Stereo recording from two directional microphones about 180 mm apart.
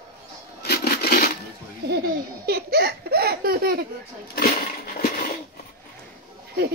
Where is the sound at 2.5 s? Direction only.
60° right (ahead or behind).